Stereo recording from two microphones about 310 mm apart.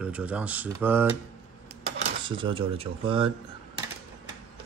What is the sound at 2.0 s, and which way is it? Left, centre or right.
Speech, centre.